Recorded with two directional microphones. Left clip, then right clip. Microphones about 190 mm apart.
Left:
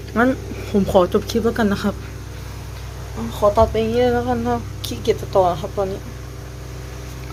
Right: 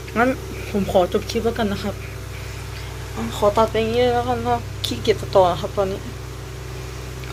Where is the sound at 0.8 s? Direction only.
30° left (ahead or behind).